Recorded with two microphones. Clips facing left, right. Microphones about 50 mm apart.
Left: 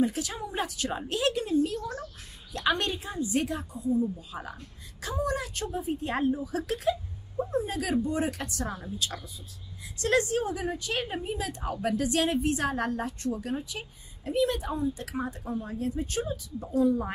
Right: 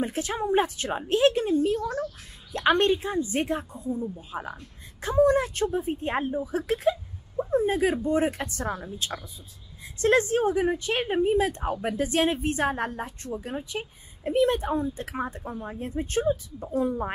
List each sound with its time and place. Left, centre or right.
0.0 s a woman's voice: right
4.4 s speech: centre
5.0 s a woman's voice: right